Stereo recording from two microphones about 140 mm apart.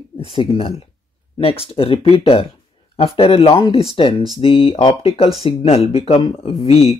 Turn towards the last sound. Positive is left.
turn(degrees=45)  # may be behind; listen again after turning